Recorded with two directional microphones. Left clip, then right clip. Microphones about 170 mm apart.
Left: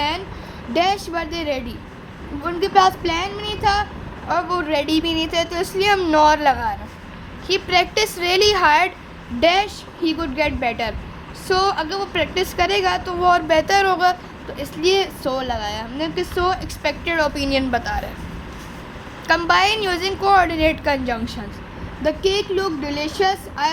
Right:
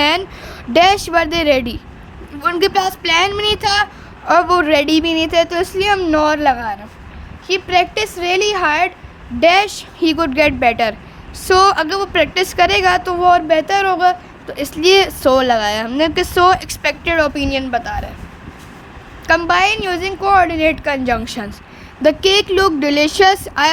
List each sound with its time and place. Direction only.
0.7 s a woman's voice: 45° right (ahead or behind); by 8.9 s 15° right (ahead or behind)
9.4 s a woman's voice: 25° right (ahead or behind)
9.6 s a woman's voice: 45° right (ahead or behind)
13.1 s a woman's voice: 15° right (ahead or behind)
14.4 s a woman's voice: 35° right (ahead or behind); by 18.1 s 15° right (ahead or behind)
19.3 s a woman's voice: 20° right (ahead or behind)
22.0 s speech: 55° right (ahead or behind)